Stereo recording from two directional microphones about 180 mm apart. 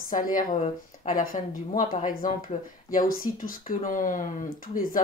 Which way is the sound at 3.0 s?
50° left (ahead or behind).